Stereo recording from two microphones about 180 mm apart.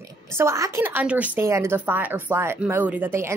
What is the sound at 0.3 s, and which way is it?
Speech, 15° right (ahead or behind).